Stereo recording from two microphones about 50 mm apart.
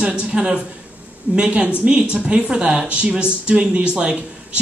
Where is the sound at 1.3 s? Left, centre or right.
Right.